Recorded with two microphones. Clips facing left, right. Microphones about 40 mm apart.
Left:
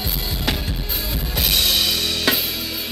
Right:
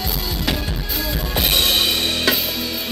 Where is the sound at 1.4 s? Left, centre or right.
Right.